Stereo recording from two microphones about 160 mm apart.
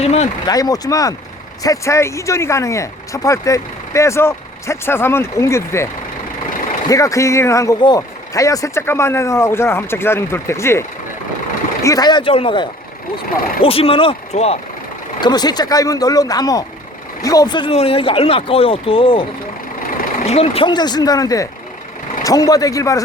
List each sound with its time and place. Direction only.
0.0 s a sound: 40° left (ahead or behind)
0.4 s speech: 25° left (ahead or behind); by 14.6 s 40° left (ahead or behind)
15.2 s speech: 25° left (ahead or behind)